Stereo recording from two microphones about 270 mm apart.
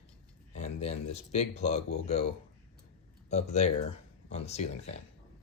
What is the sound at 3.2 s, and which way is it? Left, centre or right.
Speech, left.